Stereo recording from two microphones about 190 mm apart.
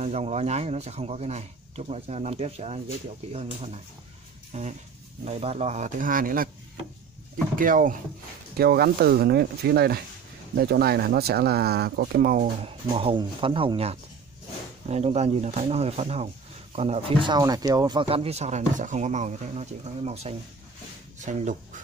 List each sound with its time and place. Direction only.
0.0 s speech: 35° right (ahead or behind)
7.5 s speech: 45° right (ahead or behind)
12.6 s speech: 30° right (ahead or behind)